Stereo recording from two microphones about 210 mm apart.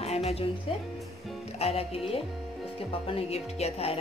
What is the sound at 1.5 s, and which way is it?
Music, 30° left (ahead or behind).